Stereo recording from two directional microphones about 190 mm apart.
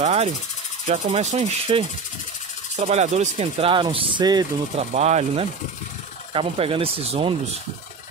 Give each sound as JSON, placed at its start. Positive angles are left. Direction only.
{"t": 0.0, "sound": "a sound", "side_deg": -35}
{"t": 0.8, "sound": "speech", "side_deg": -40}
{"t": 4.7, "sound": "speech", "side_deg": -35}